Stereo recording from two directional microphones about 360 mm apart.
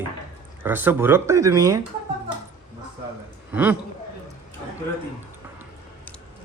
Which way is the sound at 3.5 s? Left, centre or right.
Centre.